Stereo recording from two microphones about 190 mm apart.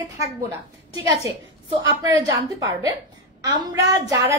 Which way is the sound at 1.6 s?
25° right (ahead or behind).